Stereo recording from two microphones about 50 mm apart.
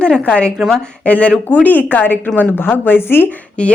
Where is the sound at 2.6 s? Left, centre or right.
Left.